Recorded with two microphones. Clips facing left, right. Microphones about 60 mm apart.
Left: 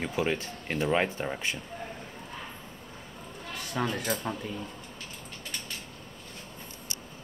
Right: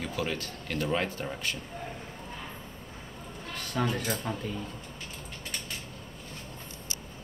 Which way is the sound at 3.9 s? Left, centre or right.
Centre.